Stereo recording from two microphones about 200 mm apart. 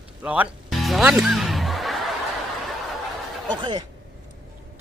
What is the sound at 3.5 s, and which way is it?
Speech, 20° right (ahead or behind).